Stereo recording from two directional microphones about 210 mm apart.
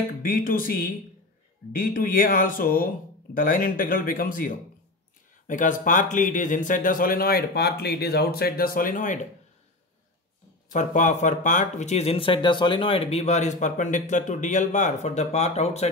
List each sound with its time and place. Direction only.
0.2 s speech: 40° left (ahead or behind)
10.7 s speech: 35° left (ahead or behind)